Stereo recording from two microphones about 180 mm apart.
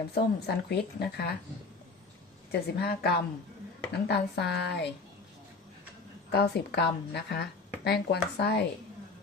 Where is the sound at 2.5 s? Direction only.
60° left (ahead or behind).